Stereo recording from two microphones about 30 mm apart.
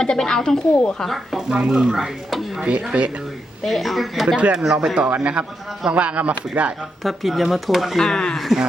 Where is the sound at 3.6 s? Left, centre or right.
Centre.